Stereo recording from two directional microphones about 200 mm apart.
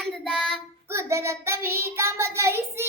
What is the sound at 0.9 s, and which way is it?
Child singing, 15° right (ahead or behind).